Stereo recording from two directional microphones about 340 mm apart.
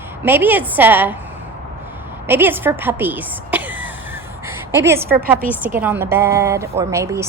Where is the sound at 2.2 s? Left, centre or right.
Centre.